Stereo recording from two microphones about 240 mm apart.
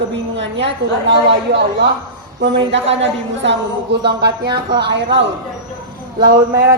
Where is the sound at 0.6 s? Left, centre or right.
Right.